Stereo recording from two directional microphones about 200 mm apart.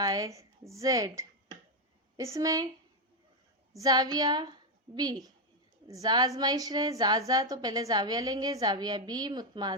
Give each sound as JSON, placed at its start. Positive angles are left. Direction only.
{"t": 0.0, "sound": "a woman's voice", "side_deg": -20}
{"t": 3.8, "sound": "a woman's voice", "side_deg": -20}